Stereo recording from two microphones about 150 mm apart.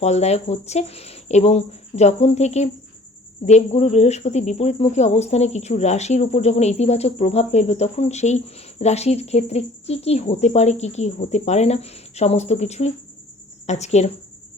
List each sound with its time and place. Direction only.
0.0 s speech: 45° left (ahead or behind)